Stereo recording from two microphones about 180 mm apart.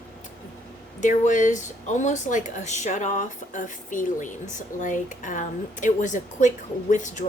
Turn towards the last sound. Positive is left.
turn(degrees=45)  # may be behind; listen again after turning